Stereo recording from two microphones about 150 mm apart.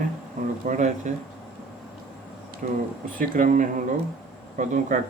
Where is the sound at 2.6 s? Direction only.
60° right (ahead or behind).